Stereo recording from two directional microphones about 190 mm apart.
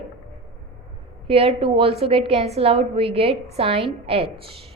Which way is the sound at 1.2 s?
30° right (ahead or behind).